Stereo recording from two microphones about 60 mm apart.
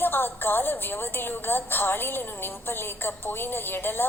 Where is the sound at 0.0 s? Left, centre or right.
Left.